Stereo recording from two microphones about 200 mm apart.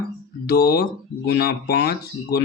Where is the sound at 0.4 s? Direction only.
50° left (ahead or behind).